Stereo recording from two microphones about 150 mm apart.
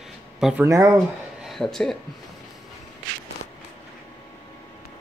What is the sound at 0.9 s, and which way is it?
Speech, centre (ahead or behind).